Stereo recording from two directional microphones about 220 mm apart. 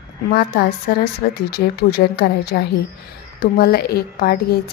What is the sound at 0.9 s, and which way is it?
A woman's voice, 45° left (ahead or behind).